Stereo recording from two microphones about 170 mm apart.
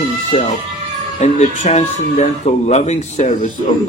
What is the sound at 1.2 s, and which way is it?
A man's voice, 45° left (ahead or behind).